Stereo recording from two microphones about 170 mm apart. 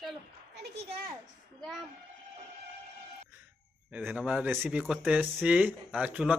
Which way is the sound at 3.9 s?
5° right (ahead or behind).